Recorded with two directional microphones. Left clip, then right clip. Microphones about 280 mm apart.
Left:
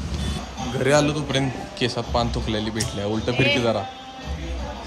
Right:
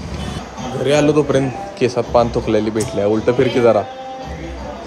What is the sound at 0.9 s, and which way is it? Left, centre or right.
Speech, centre.